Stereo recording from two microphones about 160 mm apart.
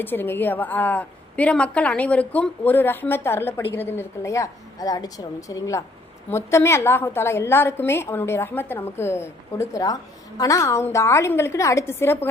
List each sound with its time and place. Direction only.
0.0 s a woman's voice: 10° left (ahead or behind)